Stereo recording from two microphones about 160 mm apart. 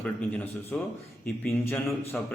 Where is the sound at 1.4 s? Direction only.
15° left (ahead or behind).